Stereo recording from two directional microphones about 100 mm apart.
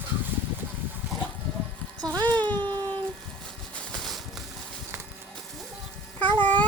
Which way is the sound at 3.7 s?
5° left (ahead or behind).